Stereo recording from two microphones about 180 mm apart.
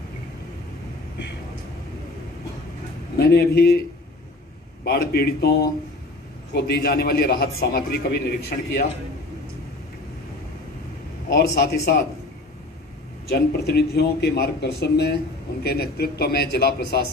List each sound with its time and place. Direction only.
3.2 s a man's voice: 60° left (ahead or behind)
4.8 s a man's voice: 60° left (ahead or behind)
11.3 s a man's voice: 65° left (ahead or behind)
13.2 s a man's voice: 65° left (ahead or behind)